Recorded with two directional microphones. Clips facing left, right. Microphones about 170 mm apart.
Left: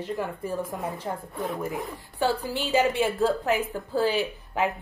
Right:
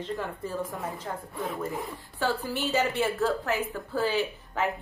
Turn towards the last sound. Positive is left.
turn(degrees=15)  # may be behind; listen again after turning